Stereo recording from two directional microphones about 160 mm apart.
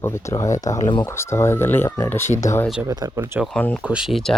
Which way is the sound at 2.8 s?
25° right (ahead or behind).